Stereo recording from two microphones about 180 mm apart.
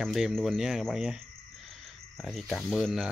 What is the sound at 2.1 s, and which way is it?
Speech, centre (ahead or behind).